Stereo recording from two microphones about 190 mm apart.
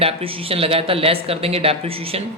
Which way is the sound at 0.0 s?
30° right (ahead or behind).